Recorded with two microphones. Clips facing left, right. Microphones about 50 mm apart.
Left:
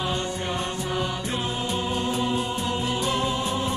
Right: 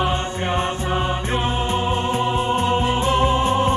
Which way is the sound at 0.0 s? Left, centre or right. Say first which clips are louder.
Right 5 dB; right.